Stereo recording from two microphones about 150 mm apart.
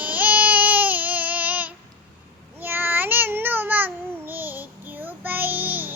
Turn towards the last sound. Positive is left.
turn(degrees=-10)  # may be behind; listen again after turning